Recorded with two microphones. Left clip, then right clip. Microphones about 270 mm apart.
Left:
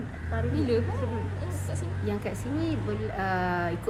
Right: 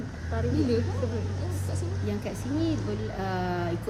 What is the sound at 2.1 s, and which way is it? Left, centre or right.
A woman's voice, centre.